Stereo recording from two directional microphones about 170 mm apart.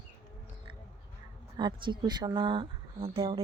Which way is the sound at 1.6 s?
25° right (ahead or behind).